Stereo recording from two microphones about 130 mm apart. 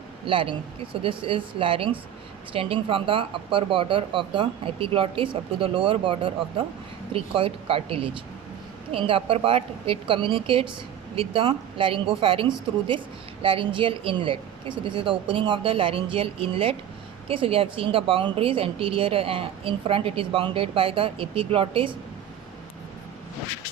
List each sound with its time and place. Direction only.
0.3 s speech: 40° right (ahead or behind)